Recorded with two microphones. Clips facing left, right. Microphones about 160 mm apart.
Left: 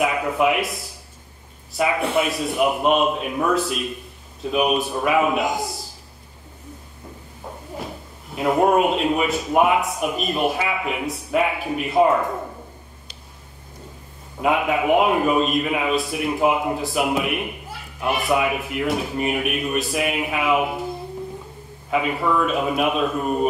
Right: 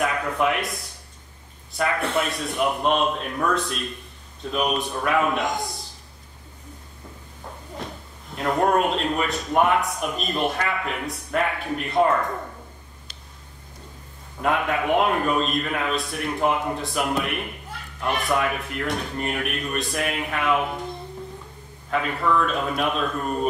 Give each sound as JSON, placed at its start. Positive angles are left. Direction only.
{"t": 0.0, "sound": "a man's voice", "side_deg": 5}
{"t": 8.4, "sound": "a man's voice", "side_deg": 10}
{"t": 14.4, "sound": "a man's voice", "side_deg": 5}
{"t": 21.9, "sound": "a man's voice", "side_deg": 10}